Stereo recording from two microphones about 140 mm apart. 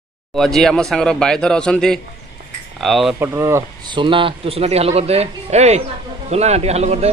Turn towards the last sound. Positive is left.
turn(degrees=-50)  # may be behind; listen again after turning